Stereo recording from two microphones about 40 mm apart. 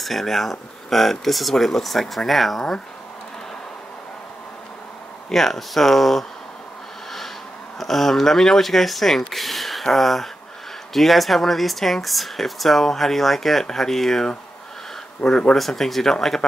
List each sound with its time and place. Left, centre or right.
0.0 s speech: centre
5.3 s speech: centre
7.8 s speech: centre
15.5 s speech: centre